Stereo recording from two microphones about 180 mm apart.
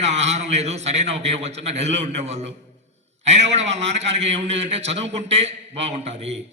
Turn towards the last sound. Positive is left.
turn(degrees=-35)  # may be behind; listen again after turning